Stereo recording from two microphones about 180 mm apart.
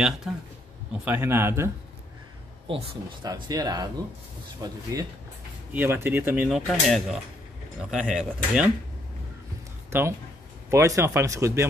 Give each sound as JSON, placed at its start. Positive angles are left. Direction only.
{"t": 0.3, "sound": "speech", "side_deg": 0}
{"t": 2.7, "sound": "speech", "side_deg": -25}
{"t": 6.7, "sound": "speech", "side_deg": 0}
{"t": 9.8, "sound": "speech", "side_deg": -15}